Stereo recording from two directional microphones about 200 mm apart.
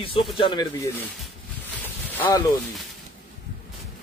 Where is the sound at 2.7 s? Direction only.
Centre (ahead or behind).